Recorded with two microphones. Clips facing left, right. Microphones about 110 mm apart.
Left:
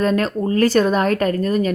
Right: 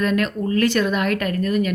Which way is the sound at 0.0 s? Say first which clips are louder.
Left 2 dB; 35° left (ahead or behind).